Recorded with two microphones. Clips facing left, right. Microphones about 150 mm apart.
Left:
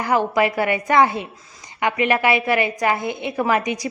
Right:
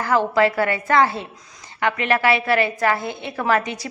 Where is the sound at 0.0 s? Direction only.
15° left (ahead or behind).